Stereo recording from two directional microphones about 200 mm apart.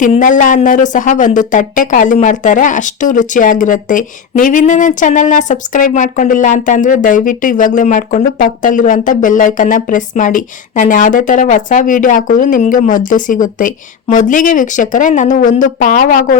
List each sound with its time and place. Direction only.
0.0 s a woman's voice: 40° left (ahead or behind)